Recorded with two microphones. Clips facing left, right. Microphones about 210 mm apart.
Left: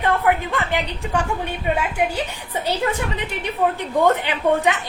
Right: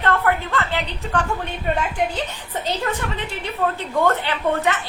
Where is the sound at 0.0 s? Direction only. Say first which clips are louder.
Left 1 dB; 15° left (ahead or behind).